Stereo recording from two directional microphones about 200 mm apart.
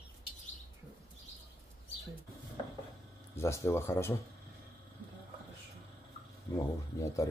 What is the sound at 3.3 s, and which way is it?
Speech, 15° left (ahead or behind).